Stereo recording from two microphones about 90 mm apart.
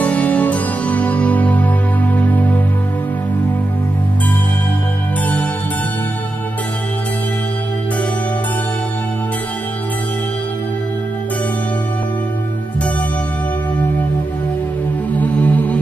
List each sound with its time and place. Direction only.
0.0 s music: 15° left (ahead or behind)
15.1 s music: 20° left (ahead or behind)